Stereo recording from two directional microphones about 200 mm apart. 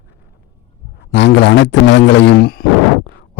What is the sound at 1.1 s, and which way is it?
Speech, 60° left (ahead or behind).